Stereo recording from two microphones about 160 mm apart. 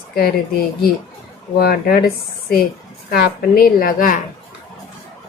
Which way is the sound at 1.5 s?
70° left (ahead or behind).